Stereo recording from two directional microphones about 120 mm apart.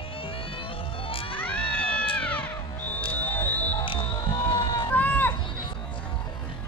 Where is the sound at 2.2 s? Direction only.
15° left (ahead or behind).